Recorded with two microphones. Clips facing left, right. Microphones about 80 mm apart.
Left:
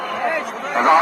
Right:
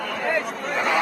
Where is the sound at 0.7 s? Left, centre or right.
Left.